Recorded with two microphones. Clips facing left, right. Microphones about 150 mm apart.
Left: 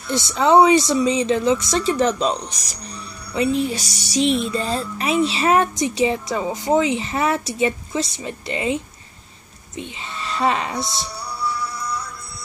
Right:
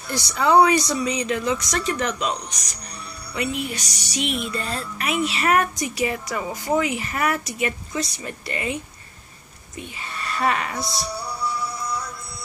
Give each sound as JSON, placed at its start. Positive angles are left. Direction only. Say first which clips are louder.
{"t": 0.1, "sound": "speech", "louder": "left 3 dB", "side_deg": 25}